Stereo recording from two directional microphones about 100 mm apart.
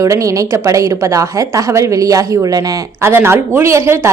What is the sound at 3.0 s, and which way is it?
A woman's voice, 25° right (ahead or behind).